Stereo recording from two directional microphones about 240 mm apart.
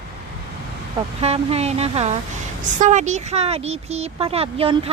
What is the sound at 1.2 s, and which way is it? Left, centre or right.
Speech, right.